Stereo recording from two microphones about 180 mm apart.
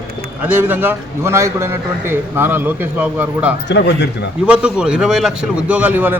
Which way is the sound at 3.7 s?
70° left (ahead or behind).